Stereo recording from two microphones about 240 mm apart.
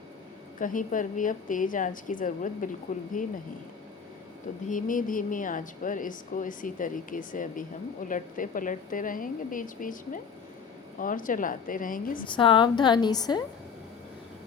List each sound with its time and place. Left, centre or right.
0.6 s speech: left
4.7 s speech: left
12.3 s a woman's voice: centre